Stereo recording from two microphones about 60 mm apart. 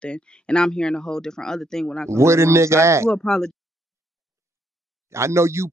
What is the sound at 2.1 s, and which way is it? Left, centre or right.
Speech, right.